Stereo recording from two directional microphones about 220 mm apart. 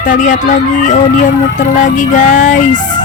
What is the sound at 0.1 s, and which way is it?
Fowl, 35° left (ahead or behind).